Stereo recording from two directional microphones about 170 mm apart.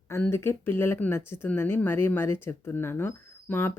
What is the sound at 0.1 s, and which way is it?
Speech, 15° left (ahead or behind).